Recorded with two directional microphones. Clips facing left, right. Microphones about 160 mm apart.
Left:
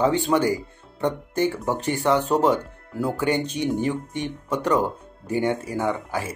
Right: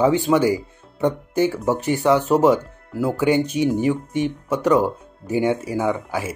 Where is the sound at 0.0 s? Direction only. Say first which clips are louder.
Right 3 dB; 10° right (ahead or behind).